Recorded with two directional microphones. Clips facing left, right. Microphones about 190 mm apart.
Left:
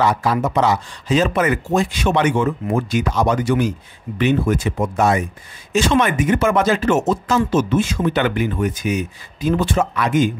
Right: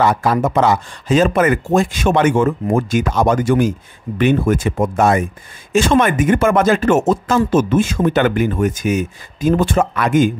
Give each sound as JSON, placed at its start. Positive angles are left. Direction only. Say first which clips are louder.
{"t": 0.0, "sound": "speech", "louder": "right 3 dB", "side_deg": -50}